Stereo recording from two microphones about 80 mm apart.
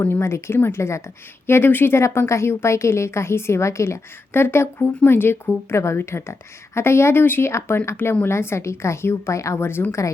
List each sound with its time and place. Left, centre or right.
0.0 s speech: left